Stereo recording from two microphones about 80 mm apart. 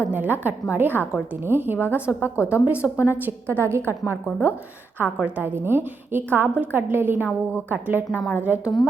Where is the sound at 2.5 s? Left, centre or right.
Centre.